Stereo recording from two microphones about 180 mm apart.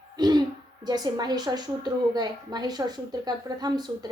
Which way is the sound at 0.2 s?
25° right (ahead or behind).